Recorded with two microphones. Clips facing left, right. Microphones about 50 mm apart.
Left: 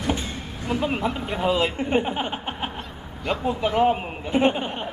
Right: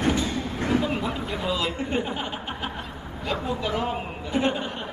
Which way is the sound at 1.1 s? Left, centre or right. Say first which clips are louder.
Left 5 dB; left.